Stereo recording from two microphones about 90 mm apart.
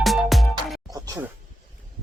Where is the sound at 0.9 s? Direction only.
45° right (ahead or behind).